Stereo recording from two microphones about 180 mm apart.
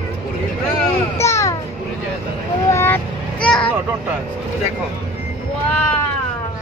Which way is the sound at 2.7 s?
15° left (ahead or behind).